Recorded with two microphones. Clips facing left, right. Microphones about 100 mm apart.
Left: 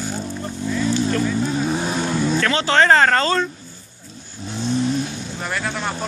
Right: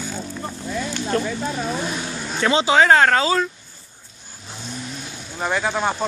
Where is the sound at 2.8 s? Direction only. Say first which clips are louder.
Left 1 dB; 5° right (ahead or behind).